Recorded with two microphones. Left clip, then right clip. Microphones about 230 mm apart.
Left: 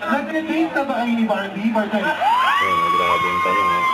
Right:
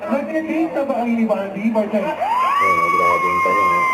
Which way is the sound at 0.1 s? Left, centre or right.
Left.